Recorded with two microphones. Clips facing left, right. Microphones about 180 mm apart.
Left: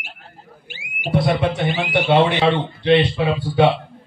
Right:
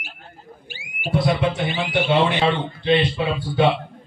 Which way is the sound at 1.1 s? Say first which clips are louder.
Left 2 dB; 60° left (ahead or behind).